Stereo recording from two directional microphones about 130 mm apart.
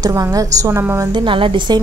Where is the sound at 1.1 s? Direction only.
40° right (ahead or behind).